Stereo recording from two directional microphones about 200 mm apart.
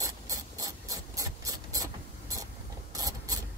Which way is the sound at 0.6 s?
15° right (ahead or behind).